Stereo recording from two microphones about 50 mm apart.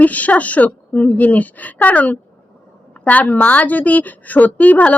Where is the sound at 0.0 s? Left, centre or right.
Left.